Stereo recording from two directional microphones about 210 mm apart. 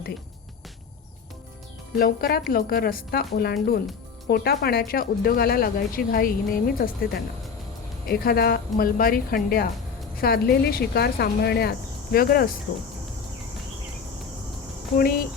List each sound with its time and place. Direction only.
2.0 s speech: 45° left (ahead or behind)